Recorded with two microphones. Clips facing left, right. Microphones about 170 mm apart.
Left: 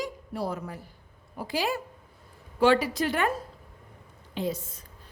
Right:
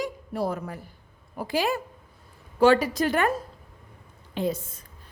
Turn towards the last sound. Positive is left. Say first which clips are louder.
# right 3 dB
turn(degrees=-50)  # may be behind; listen again after turning